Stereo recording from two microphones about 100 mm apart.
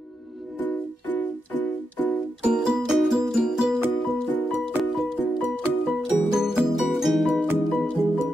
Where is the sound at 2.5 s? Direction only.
5° right (ahead or behind).